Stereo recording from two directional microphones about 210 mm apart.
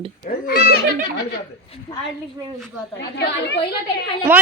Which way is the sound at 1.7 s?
30° left (ahead or behind).